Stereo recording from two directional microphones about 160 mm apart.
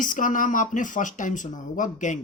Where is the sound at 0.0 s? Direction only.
55° left (ahead or behind).